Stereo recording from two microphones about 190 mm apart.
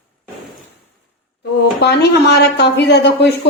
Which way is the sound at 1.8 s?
65° left (ahead or behind).